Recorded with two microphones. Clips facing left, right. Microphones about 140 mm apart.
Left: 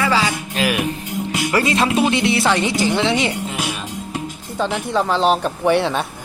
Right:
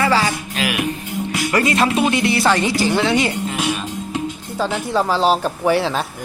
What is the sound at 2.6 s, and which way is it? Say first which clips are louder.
Speech: right 1 dB; 20° left (ahead or behind).